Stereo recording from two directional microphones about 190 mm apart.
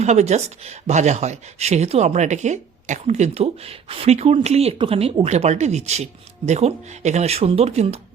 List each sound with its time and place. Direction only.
0.0 s speech: 35° right (ahead or behind)